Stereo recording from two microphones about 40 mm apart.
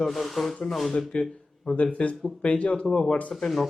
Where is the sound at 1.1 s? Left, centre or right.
Left.